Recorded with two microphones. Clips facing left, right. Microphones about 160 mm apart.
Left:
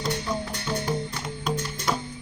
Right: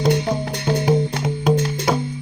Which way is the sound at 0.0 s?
75° right (ahead or behind).